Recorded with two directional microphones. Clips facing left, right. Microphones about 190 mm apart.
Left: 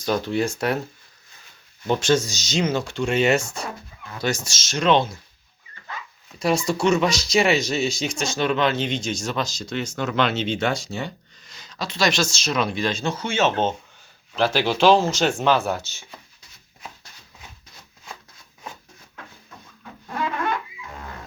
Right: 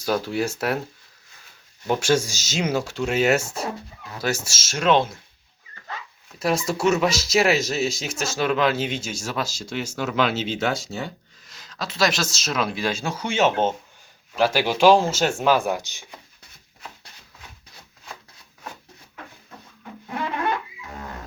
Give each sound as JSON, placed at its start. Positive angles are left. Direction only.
{"t": 0.0, "sound": "speech", "side_deg": -5}
{"t": 1.9, "sound": "speech", "side_deg": -10}
{"t": 5.9, "sound": "zipper", "side_deg": -40}
{"t": 6.4, "sound": "speech", "side_deg": 0}